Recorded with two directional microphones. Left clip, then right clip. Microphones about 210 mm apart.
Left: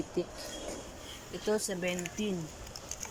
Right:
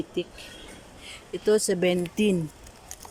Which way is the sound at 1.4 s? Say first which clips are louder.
Right 10 dB; 25° right (ahead or behind).